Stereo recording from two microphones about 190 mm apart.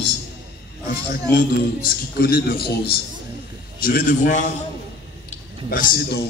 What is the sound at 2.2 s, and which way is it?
A man's voice, 55° left (ahead or behind).